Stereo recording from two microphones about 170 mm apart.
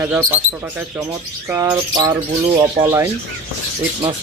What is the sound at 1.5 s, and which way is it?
Bird, 20° right (ahead or behind).